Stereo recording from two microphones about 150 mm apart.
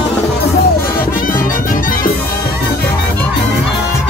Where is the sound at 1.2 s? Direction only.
65° left (ahead or behind).